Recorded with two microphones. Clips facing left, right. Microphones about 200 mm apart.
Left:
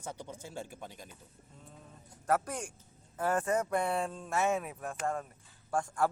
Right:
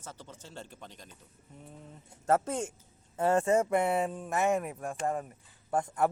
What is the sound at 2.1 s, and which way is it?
A man's voice, 25° right (ahead or behind).